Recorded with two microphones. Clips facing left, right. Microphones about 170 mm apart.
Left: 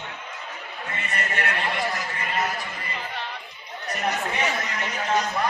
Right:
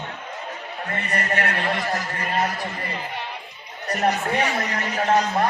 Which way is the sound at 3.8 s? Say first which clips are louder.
Right 5 dB; 60° right (ahead or behind).